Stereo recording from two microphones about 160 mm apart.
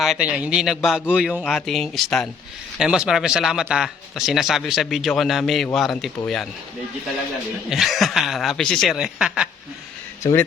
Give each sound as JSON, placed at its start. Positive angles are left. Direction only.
{"t": 0.0, "sound": "speech", "side_deg": -5}
{"t": 7.7, "sound": "speech", "side_deg": 0}
{"t": 10.2, "sound": "speech", "side_deg": 20}